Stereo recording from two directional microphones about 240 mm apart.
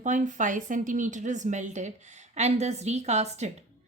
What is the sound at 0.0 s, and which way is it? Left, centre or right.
Speech, right.